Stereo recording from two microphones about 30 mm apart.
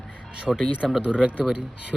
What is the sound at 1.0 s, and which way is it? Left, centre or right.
Speech, right.